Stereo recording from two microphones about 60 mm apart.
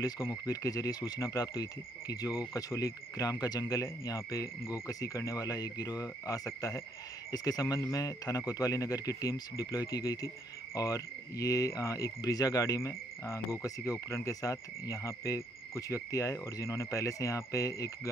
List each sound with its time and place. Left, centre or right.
0.3 s speech: left
7.3 s speech: left
13.2 s speech: left